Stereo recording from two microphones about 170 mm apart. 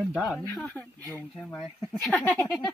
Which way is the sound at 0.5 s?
5° left (ahead or behind).